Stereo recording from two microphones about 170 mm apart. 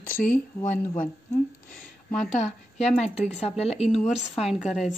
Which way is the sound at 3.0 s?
40° left (ahead or behind).